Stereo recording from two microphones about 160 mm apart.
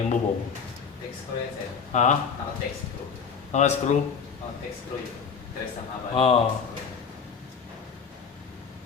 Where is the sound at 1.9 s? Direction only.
45° left (ahead or behind).